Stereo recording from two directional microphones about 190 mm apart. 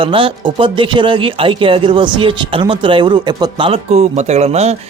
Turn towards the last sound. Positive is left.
turn(degrees=-35)  # may be behind; listen again after turning